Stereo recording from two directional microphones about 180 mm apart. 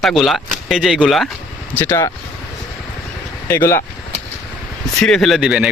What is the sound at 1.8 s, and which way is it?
Speech, 10° left (ahead or behind).